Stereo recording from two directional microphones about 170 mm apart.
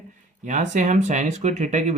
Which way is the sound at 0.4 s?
45° right (ahead or behind).